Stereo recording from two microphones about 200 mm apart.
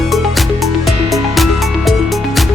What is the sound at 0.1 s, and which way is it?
Music, centre (ahead or behind).